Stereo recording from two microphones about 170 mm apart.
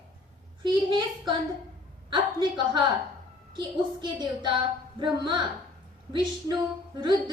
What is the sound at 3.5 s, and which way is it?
A woman's voice, 25° right (ahead or behind).